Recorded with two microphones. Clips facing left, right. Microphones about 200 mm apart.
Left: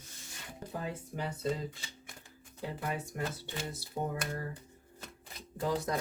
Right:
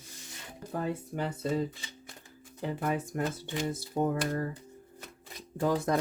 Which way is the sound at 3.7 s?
50° right (ahead or behind).